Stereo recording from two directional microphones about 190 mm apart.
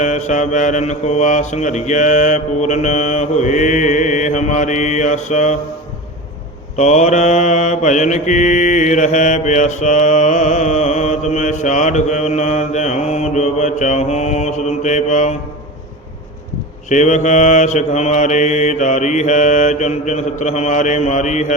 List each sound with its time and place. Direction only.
0.0 s mantra: 40° left (ahead or behind)
6.7 s mantra: 40° left (ahead or behind)
16.9 s mantra: 40° left (ahead or behind)